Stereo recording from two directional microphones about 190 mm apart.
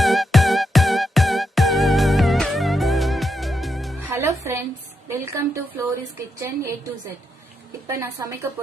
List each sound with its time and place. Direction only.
0.0 s music: centre (ahead or behind)
4.1 s music: 15° right (ahead or behind)
5.0 s a woman's voice: 15° right (ahead or behind)
7.9 s a woman's voice: 15° right (ahead or behind)